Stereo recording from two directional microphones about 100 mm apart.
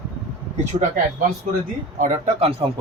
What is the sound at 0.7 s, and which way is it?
Speech, 65° right (ahead or behind).